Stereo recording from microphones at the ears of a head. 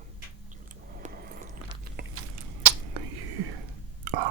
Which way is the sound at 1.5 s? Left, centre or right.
Right.